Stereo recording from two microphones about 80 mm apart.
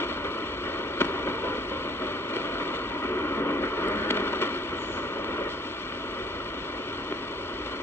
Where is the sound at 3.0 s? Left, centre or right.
Left.